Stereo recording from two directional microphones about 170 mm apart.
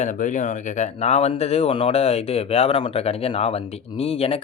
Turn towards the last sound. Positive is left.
turn(degrees=35)  # may be behind; listen again after turning